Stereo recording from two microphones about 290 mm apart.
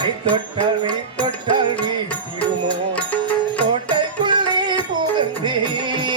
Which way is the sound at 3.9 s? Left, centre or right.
Centre.